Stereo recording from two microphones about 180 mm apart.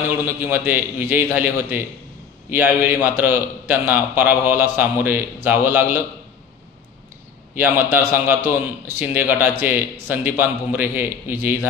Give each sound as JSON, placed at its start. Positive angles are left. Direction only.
{"t": 0.2, "sound": "a man's voice", "side_deg": -10}
{"t": 7.5, "sound": "a man's voice", "side_deg": -10}